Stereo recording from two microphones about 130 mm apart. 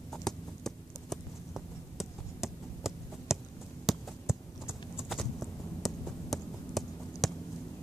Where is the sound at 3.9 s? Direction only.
5° right (ahead or behind).